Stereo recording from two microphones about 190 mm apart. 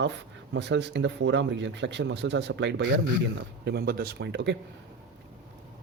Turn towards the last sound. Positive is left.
turn(degrees=-65)  # may be behind; listen again after turning